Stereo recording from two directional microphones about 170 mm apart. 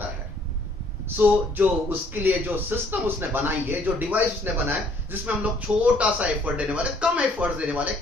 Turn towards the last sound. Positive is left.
turn(degrees=-10)  # may be behind; listen again after turning